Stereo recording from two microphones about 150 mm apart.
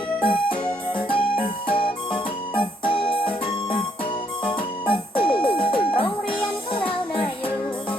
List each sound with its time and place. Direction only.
0.2 s music: 35° left (ahead or behind)
5.5 s a sound: 35° left (ahead or behind)
6.7 s music: 35° left (ahead or behind)